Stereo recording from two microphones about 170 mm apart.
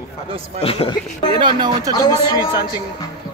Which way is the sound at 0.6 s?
35° left (ahead or behind).